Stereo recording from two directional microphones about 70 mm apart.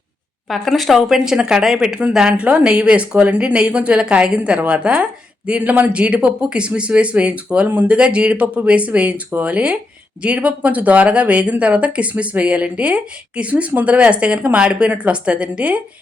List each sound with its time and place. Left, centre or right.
0.4 s speech: centre